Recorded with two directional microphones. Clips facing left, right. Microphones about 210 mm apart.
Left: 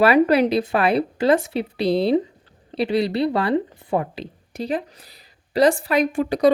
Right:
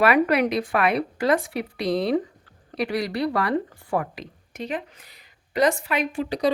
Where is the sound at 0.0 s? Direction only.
30° left (ahead or behind).